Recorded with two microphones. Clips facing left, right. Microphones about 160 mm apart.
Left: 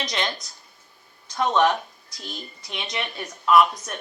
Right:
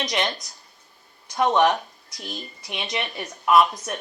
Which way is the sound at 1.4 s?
20° right (ahead or behind).